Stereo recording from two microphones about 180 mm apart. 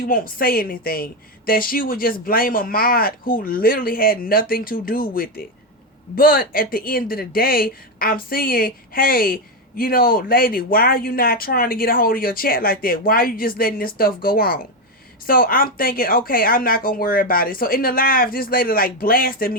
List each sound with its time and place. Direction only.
0.1 s speech: 55° left (ahead or behind)